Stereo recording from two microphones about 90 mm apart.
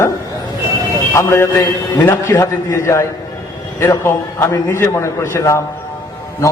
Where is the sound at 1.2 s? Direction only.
35° left (ahead or behind).